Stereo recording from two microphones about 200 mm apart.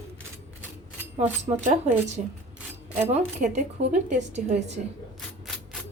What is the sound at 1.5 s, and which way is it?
Speech, 25° right (ahead or behind).